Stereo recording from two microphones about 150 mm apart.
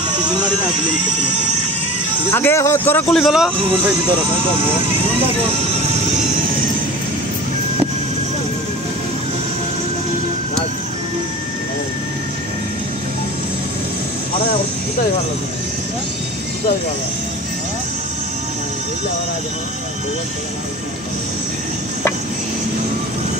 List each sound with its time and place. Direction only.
2.3 s speech: 15° left (ahead or behind)
3.1 s speech: centre (ahead or behind)
3.5 s speech: 35° right (ahead or behind)